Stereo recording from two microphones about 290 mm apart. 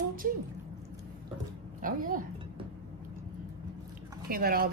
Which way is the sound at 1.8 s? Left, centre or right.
Right.